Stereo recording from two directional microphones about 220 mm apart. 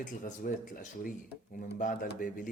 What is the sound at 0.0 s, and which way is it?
Speech, 35° left (ahead or behind).